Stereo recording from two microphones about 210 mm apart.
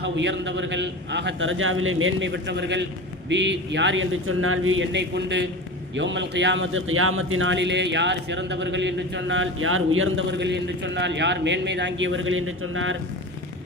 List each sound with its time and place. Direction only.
0.0 s a man's voice: 60° right (ahead or behind)